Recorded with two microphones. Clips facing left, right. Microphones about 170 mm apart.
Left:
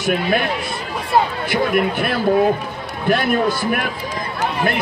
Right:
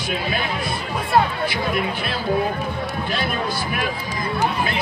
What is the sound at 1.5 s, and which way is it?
Speech, 55° left (ahead or behind).